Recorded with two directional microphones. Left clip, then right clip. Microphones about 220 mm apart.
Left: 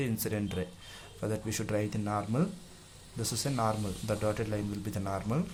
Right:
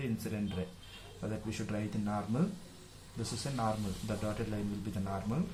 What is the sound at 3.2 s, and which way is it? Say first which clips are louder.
Speech: left 5 dB; 35° left (ahead or behind).